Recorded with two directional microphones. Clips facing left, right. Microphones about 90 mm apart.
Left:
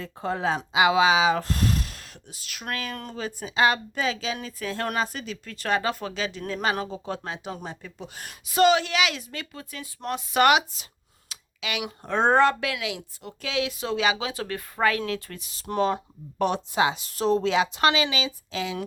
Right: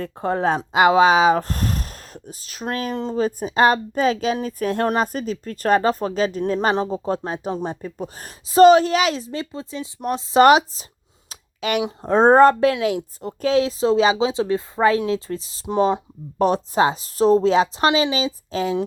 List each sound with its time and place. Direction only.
0.0 s speech: 45° right (ahead or behind)
2.9 s speech: 25° right (ahead or behind)
3.2 s a woman's voice: 40° right (ahead or behind)
11.3 s clicking: 45° right (ahead or behind)
11.8 s a woman's voice: 30° right (ahead or behind)
16.4 s a woman's voice: 35° right (ahead or behind)